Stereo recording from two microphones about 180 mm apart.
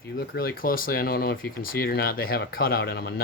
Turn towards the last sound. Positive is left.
turn(degrees=60)  # may be behind; listen again after turning